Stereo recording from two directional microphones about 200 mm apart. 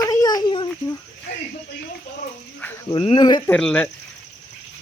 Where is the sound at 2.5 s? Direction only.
10° left (ahead or behind).